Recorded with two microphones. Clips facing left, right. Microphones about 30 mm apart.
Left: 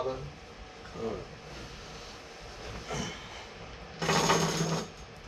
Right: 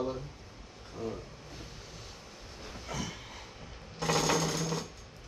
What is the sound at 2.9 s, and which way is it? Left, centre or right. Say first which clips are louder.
Train: left 2 dB; centre.